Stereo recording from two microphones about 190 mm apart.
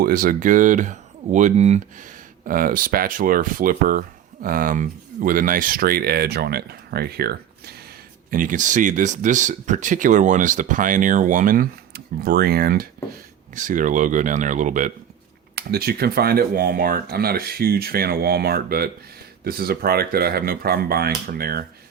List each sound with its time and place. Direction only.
0.0 s speech: 45° right (ahead or behind)
8.3 s speech: 45° right (ahead or behind)
13.6 s speech: 40° right (ahead or behind)
15.5 s speech: 55° right (ahead or behind)